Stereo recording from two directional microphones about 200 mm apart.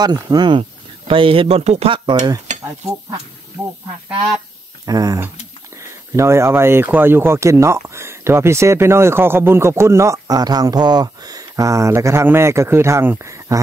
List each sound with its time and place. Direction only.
0.0 s speech: 20° right (ahead or behind)
4.8 s speech: 20° right (ahead or behind)